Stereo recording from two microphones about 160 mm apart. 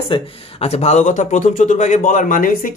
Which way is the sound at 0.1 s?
40° left (ahead or behind).